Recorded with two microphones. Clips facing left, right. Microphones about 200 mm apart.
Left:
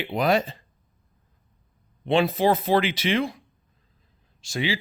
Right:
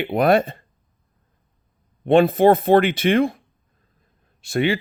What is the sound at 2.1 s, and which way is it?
A man's voice, 55° right (ahead or behind).